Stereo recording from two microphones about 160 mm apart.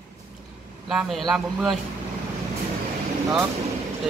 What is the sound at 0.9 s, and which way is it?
Speech, centre (ahead or behind).